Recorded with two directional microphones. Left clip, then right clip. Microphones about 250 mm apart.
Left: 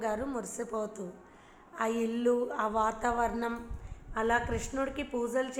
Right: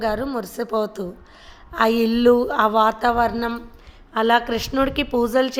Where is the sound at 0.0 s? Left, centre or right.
Right.